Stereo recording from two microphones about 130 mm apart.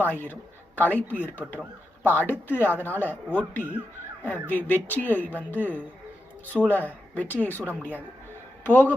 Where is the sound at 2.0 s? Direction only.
15° left (ahead or behind).